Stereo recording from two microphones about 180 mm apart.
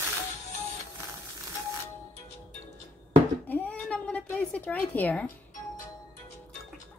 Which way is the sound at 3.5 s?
5° left (ahead or behind).